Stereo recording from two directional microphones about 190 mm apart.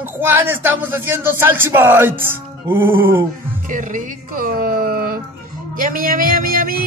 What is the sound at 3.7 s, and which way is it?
Music, 45° right (ahead or behind).